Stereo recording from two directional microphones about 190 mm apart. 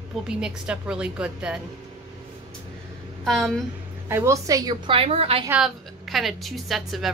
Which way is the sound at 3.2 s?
Centre (ahead or behind).